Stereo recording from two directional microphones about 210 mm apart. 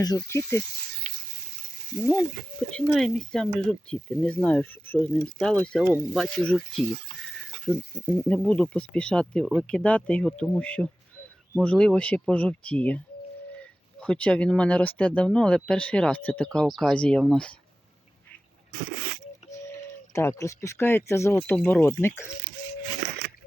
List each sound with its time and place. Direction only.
0.0 s speech: 15° left (ahead or behind)
2.7 s speech: centre (ahead or behind)
19.5 s speech: 15° left (ahead or behind)
23.0 s a sound: 50° right (ahead or behind)